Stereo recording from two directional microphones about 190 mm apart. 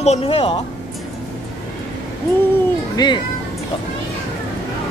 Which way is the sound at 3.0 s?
20° left (ahead or behind).